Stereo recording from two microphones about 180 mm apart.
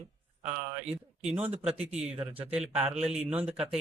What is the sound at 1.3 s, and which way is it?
Speech, 10° right (ahead or behind).